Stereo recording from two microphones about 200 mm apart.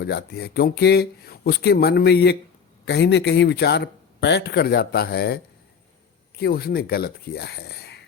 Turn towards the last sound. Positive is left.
turn(degrees=55)  # may be behind; listen again after turning